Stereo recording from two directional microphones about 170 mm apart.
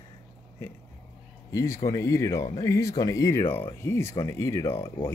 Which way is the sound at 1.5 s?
15° left (ahead or behind).